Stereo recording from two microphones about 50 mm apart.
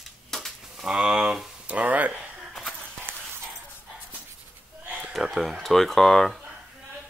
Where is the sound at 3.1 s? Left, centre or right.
Right.